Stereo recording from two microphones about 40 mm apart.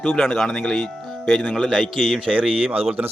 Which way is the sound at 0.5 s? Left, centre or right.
Left.